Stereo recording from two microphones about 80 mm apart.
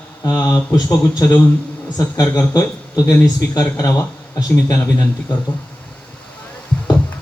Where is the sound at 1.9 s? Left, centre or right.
Left.